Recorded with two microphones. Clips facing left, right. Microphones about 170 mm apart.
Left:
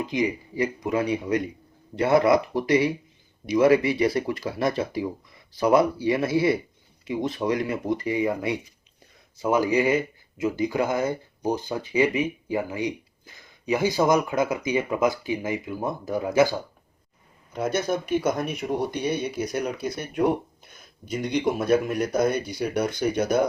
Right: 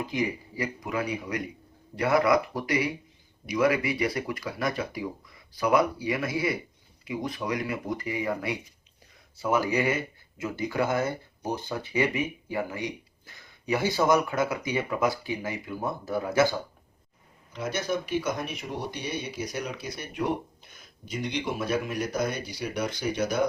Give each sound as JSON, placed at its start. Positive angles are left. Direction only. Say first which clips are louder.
{"t": 0.0, "sound": "speech", "louder": "left 4 dB", "side_deg": 20}
{"t": 17.5, "sound": "speech", "louder": "left 5 dB", "side_deg": 50}